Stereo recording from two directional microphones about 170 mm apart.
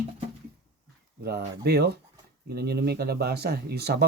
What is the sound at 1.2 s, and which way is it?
Speech, 70° right (ahead or behind).